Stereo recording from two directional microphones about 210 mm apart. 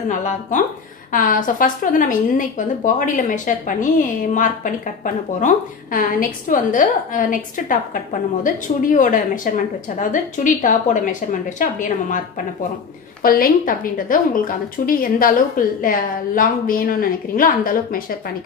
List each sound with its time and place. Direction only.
0.1 s a woman's voice: 35° left (ahead or behind)
13.2 s a woman's voice: 45° left (ahead or behind)